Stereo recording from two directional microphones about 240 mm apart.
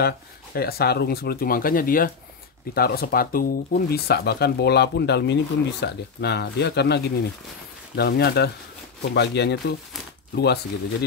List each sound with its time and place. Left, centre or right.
0.6 s speech: left